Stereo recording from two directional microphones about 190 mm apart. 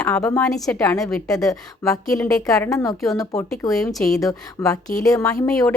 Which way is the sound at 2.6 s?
15° left (ahead or behind).